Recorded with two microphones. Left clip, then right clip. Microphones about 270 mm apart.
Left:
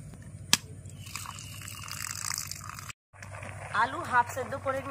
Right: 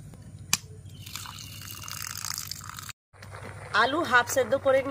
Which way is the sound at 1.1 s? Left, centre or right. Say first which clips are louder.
Right 1 dB; centre.